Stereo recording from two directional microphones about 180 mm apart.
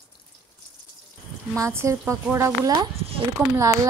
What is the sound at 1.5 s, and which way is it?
Speech, 15° right (ahead or behind).